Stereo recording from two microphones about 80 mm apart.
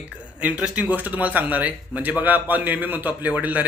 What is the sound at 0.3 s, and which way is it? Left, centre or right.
A man's voice, centre.